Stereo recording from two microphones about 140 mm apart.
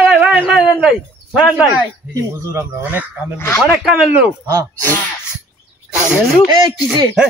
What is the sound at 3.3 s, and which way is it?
Speech, 15° left (ahead or behind).